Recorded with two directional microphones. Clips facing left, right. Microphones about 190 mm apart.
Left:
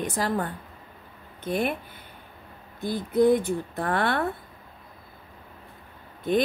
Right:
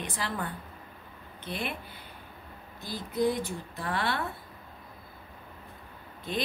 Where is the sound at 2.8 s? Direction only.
55° left (ahead or behind).